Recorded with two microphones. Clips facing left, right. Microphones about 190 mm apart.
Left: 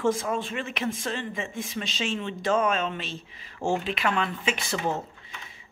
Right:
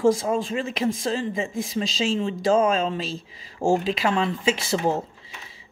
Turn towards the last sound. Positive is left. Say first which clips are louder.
# right 5 dB
turn(degrees=-35)  # may be behind; listen again after turning